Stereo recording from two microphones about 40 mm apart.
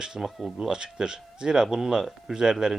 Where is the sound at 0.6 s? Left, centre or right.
Centre.